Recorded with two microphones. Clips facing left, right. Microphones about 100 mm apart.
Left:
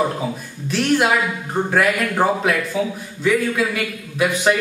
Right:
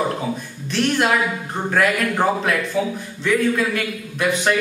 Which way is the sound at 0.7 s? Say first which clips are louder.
Left 2 dB; 5° left (ahead or behind).